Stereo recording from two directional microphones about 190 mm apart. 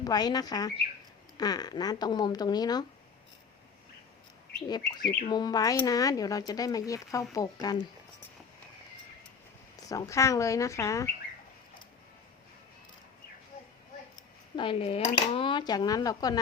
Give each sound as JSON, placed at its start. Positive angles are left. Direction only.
{"t": 0.0, "sound": "speech", "side_deg": 20}
{"t": 4.7, "sound": "speech", "side_deg": 20}
{"t": 9.7, "sound": "speech", "side_deg": 15}
{"t": 14.5, "sound": "speech", "side_deg": 25}